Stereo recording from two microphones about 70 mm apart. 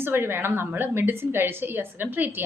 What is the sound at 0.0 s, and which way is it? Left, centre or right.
A woman's voice, right.